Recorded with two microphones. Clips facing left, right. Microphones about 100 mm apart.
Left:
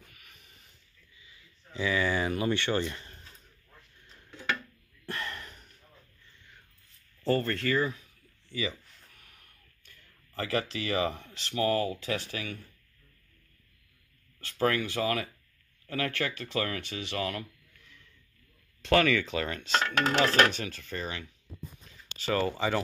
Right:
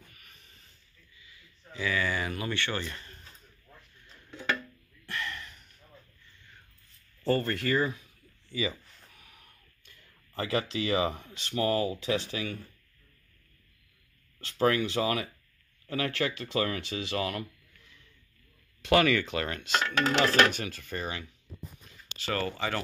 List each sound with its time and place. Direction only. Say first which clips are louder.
0.1 s a sound: even; 5° left (ahead or behind)
1.2 s speech: right 2 dB; 25° left (ahead or behind)
5.0 s a sound: even; 40° left (ahead or behind)
7.2 s speech: even; 5° right (ahead or behind)
7.8 s a sound: right 1 dB; 20° right (ahead or behind)
10.3 s speech: right 1 dB; 20° right (ahead or behind)
14.4 s speech: right 2 dB; 20° right (ahead or behind)
18.8 s speech: right 1 dB; 5° right (ahead or behind)
19.7 s dishes: even; 35° left (ahead or behind)
20.4 s speech: even; 5° right (ahead or behind)
21.9 s a sound: even; centre (ahead or behind)
22.2 s speech: left 3 dB; 5° left (ahead or behind)